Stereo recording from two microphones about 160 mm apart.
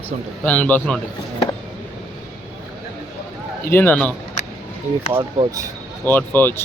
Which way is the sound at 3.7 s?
10° left (ahead or behind).